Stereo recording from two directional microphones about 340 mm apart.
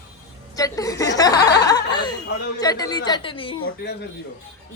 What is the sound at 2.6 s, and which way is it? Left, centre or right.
A woman's voice, centre.